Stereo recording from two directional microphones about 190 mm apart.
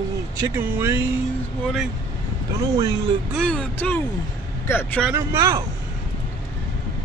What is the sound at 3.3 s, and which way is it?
Speech, 5° left (ahead or behind).